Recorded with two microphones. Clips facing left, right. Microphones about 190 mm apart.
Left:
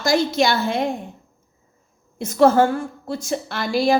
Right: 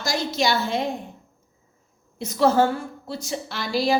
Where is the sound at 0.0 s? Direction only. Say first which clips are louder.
Left 6 dB; 55° left (ahead or behind).